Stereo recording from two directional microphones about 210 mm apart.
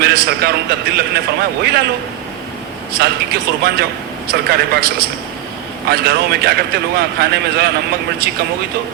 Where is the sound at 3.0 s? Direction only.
45° right (ahead or behind).